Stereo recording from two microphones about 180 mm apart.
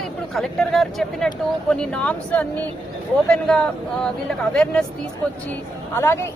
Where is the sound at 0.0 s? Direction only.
Centre (ahead or behind).